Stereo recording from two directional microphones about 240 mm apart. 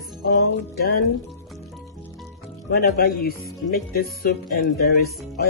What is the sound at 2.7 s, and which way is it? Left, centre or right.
Music, left.